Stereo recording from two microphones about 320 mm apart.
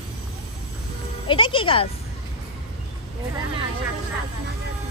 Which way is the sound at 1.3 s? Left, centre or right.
Centre.